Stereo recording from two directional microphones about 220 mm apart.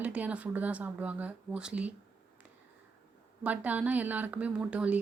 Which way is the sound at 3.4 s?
5° right (ahead or behind).